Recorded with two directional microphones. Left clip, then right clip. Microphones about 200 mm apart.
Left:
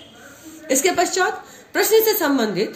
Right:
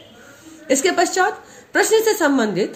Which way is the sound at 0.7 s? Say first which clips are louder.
Right 1 dB; 50° right (ahead or behind).